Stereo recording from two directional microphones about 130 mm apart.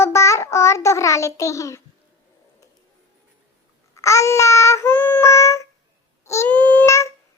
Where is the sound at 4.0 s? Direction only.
25° left (ahead or behind).